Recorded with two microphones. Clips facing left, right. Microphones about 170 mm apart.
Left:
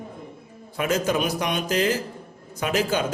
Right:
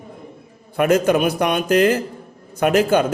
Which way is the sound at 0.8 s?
60° right (ahead or behind).